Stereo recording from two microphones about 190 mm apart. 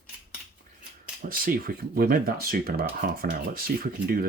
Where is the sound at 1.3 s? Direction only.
50° right (ahead or behind).